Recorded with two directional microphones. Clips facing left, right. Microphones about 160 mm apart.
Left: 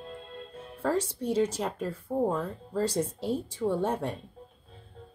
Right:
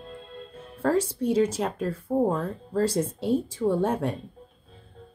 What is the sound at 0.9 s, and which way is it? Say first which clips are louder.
Speech: right 5 dB; 10° right (ahead or behind).